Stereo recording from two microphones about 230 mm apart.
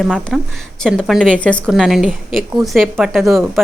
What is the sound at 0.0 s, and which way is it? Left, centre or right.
A woman's voice, centre.